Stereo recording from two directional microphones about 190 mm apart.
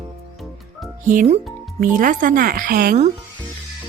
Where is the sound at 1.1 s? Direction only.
40° right (ahead or behind).